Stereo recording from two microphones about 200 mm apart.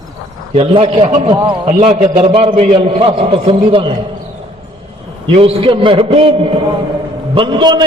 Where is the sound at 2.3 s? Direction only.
25° right (ahead or behind).